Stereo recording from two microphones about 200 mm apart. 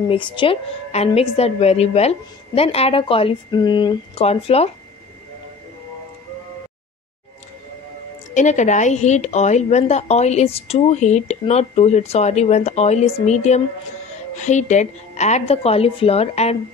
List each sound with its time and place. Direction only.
0.1 s a woman's voice: 25° left (ahead or behind)
8.4 s a woman's voice: 35° left (ahead or behind)